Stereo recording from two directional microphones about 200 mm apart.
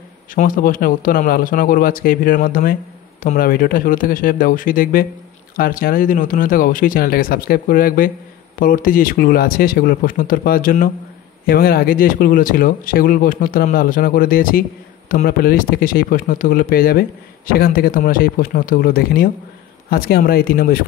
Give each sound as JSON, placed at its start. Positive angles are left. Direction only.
{"t": 0.3, "sound": "speech", "side_deg": 45}